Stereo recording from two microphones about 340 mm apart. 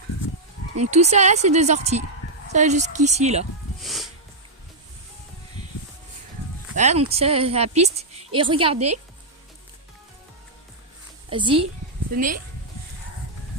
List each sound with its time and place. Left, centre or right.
0.8 s speech: centre
3.8 s music: centre
6.7 s a woman's voice: centre
8.7 s a woman's voice: right
11.3 s a woman's voice: centre